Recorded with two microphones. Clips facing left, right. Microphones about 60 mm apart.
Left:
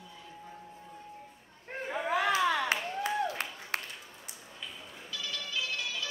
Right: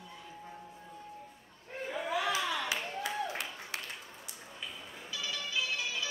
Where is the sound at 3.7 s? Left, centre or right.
Left.